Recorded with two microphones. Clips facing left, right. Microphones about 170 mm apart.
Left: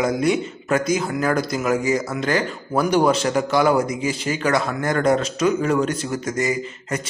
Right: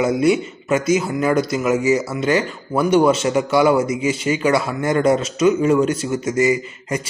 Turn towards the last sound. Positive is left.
turn(degrees=-5)  # may be behind; listen again after turning